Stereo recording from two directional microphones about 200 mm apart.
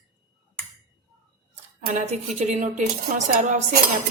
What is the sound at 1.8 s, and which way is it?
Speech, 35° right (ahead or behind).